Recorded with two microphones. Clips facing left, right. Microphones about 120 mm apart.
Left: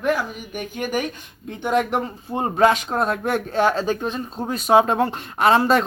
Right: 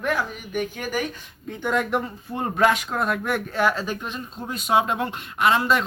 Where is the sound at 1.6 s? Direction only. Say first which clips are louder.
Left 3 dB; 25° left (ahead or behind).